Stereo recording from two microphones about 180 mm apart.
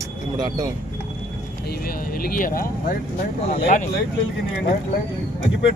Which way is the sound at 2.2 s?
55° left (ahead or behind).